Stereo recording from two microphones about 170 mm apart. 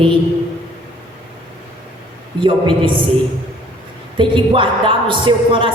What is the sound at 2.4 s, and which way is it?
Speech, 30° right (ahead or behind).